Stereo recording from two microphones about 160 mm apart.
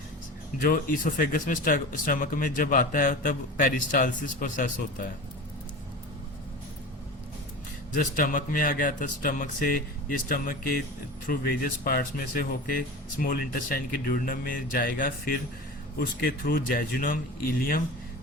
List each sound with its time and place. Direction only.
0.6 s speech: 60° left (ahead or behind)
7.9 s speech: 60° left (ahead or behind)